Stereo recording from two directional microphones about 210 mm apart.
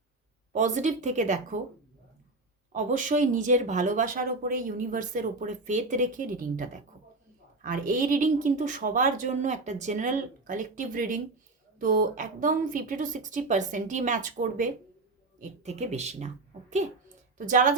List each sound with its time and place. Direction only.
0.5 s speech: 35° right (ahead or behind)
2.7 s a woman's voice: 35° right (ahead or behind)